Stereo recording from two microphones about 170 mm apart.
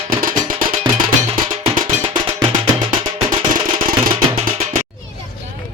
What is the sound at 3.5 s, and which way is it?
Music, 55° right (ahead or behind).